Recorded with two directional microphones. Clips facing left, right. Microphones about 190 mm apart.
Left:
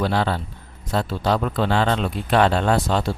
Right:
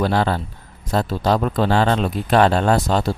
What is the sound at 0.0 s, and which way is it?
Speech, 45° right (ahead or behind).